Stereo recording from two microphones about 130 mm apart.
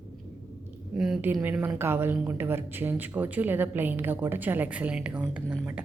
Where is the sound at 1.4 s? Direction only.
15° right (ahead or behind).